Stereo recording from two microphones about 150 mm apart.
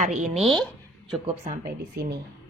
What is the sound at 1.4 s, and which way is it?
Speech, 85° right.